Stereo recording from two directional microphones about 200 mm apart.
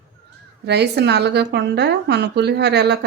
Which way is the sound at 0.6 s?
55° right (ahead or behind).